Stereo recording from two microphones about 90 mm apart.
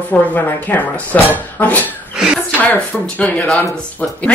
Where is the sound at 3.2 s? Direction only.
15° left (ahead or behind).